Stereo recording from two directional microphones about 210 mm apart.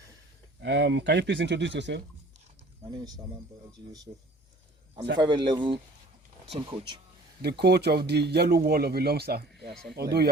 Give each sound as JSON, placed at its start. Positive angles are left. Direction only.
{"t": 0.6, "sound": "speech", "side_deg": -55}
{"t": 3.7, "sound": "speech", "side_deg": -20}
{"t": 5.1, "sound": "speech", "side_deg": -20}
{"t": 7.4, "sound": "speech", "side_deg": -50}